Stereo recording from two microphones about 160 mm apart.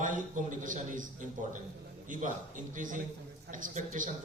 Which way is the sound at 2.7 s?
55° right (ahead or behind).